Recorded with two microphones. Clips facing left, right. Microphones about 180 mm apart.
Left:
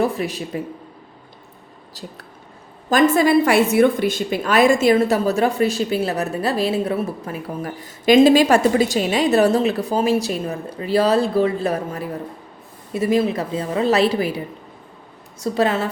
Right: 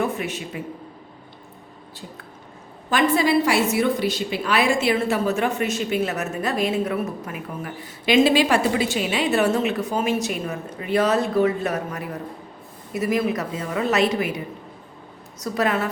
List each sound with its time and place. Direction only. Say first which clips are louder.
0.0 s a woman's voice: left 4 dB; 35° left (ahead or behind)
2.9 s a woman's voice: left 4 dB; 45° left (ahead or behind); by 15.9 s 30° left (ahead or behind)